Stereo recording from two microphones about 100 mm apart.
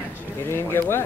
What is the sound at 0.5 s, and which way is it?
Speech, 25° left (ahead or behind).